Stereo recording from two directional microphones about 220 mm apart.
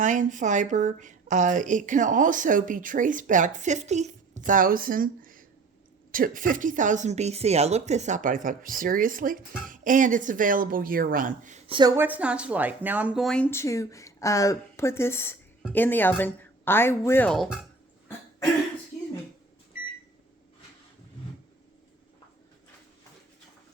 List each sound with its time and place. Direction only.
0.0 s speech: 35° right (ahead or behind)
11.7 s speech: 20° right (ahead or behind); by 17.6 s centre (ahead or behind)